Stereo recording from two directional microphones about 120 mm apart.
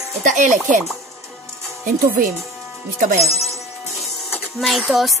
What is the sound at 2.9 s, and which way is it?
Speech, 90° right.